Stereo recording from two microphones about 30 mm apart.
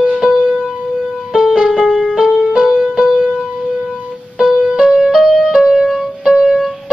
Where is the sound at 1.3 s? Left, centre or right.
Centre.